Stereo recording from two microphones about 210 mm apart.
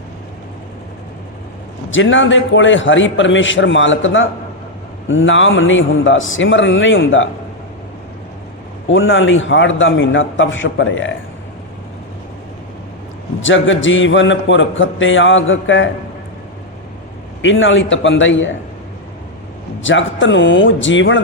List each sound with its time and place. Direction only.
1.9 s a man's voice: 65° left (ahead or behind)
8.9 s a man's voice: 65° left (ahead or behind)
13.4 s a man's voice: 65° left (ahead or behind)
17.4 s a man's voice: 65° left (ahead or behind)
19.8 s a man's voice: 65° left (ahead or behind)